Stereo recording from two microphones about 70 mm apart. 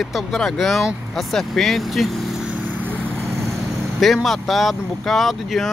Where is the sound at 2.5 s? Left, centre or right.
Right.